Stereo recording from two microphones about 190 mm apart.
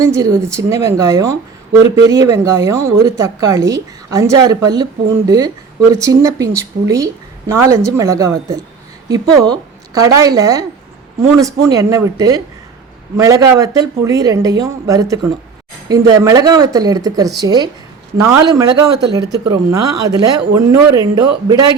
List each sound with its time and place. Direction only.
0.0 s speech: 15° right (ahead or behind)
19.7 s speech: 20° right (ahead or behind)